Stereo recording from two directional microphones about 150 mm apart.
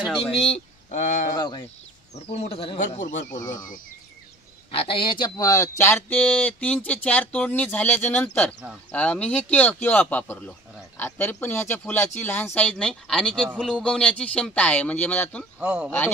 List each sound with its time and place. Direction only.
0.2 s speech: 45° left (ahead or behind)
1.3 s speech: 30° left (ahead or behind)
2.1 s speech: 45° left (ahead or behind)
2.9 s speech: 60° left (ahead or behind)
4.6 s speech: 40° left (ahead or behind); by 15.4 s 10° left (ahead or behind)
15.6 s speech: 10° right (ahead or behind)